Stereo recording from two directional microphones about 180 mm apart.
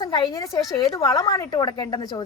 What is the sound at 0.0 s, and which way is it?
A woman's voice, 25° left (ahead or behind).